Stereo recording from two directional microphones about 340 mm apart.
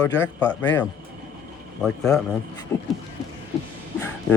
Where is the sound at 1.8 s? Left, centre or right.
Centre.